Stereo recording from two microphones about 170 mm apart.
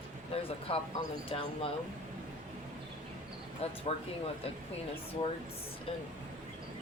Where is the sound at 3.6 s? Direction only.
35° left (ahead or behind).